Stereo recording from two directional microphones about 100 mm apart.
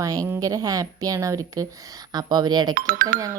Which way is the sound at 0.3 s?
35° right (ahead or behind).